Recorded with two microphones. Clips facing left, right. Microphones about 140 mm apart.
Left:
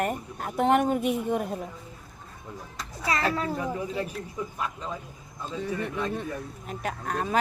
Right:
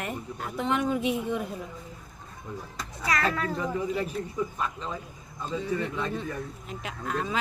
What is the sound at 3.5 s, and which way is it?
Speech, 10° left (ahead or behind).